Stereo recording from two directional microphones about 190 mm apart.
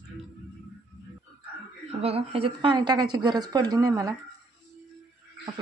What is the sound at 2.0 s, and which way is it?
A woman's voice, 30° right (ahead or behind).